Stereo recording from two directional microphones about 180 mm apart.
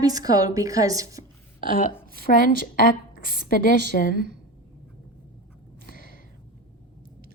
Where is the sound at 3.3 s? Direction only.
50° left (ahead or behind).